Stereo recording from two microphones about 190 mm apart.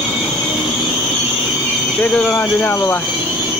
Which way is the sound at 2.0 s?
10° left (ahead or behind).